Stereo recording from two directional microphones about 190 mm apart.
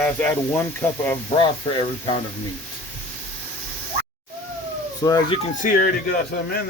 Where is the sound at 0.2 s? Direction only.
10° left (ahead or behind).